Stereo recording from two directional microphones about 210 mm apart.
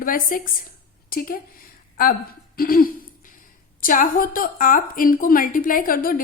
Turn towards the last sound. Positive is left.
turn(degrees=40)  # may be behind; listen again after turning